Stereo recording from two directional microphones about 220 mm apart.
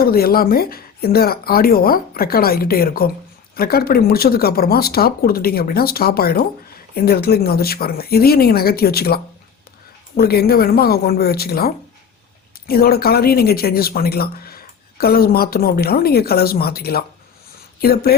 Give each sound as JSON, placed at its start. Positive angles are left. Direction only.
{"t": 0.0, "sound": "speech", "side_deg": 40}